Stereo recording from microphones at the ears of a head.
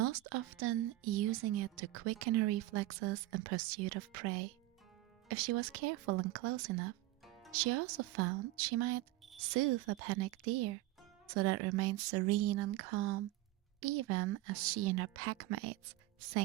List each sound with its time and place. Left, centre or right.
0.0 s a woman's voice: right